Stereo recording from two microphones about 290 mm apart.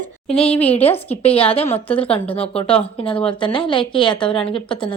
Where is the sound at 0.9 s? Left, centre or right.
Left.